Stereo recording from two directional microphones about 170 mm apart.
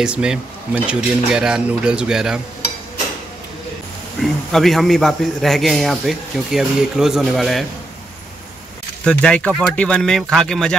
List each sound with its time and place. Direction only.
0.0 s a man's voice: 5° right (ahead or behind)
4.2 s a man's voice: centre (ahead or behind)
9.0 s a man's voice: 5° left (ahead or behind)